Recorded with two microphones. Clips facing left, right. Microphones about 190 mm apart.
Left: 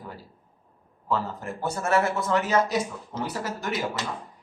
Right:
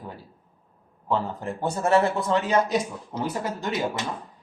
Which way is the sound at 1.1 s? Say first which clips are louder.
Right 2 dB; 20° right (ahead or behind).